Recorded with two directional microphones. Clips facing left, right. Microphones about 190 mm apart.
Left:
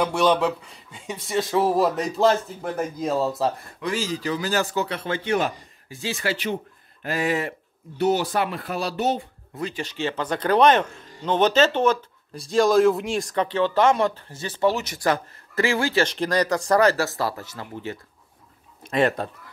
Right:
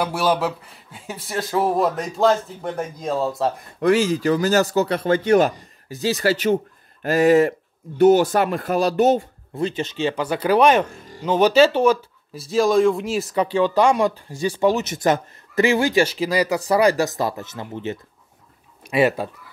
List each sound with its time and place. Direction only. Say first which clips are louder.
0.0 s speech: left 1 dB; 5° right (ahead or behind)
3.8 s speech: right 9 dB; 55° right (ahead or behind)
9.6 s speech: right 5 dB; 25° right (ahead or behind)
18.9 s speech: right 3 dB; 10° right (ahead or behind)